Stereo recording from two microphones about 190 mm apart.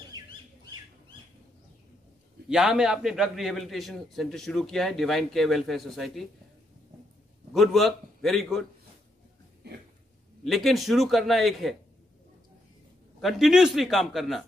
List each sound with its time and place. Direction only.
0.2 s squawk: 20° right (ahead or behind)
2.5 s a man's voice: centre (ahead or behind)
7.5 s a man's voice: centre (ahead or behind)
10.4 s a man's voice: centre (ahead or behind)
13.2 s a man's voice: centre (ahead or behind)